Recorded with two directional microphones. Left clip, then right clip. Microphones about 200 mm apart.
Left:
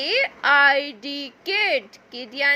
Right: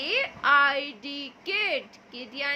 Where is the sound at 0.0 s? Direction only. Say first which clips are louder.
Left 5 dB; 30° left (ahead or behind).